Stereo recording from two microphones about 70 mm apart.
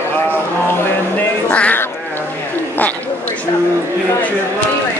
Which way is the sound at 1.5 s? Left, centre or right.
Centre.